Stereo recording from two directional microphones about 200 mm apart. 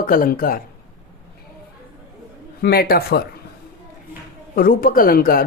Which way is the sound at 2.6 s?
50° left (ahead or behind).